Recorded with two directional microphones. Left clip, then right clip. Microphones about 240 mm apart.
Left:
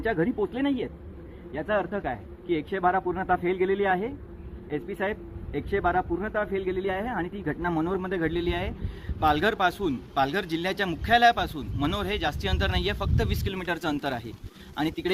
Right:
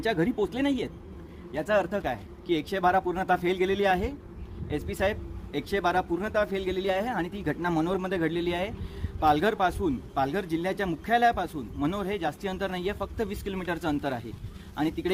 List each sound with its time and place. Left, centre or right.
0.0 s speech: centre